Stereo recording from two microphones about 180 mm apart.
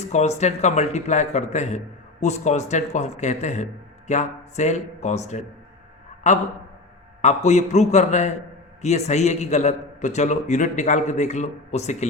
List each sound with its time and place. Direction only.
0.0 s a man's voice: 40° left (ahead or behind)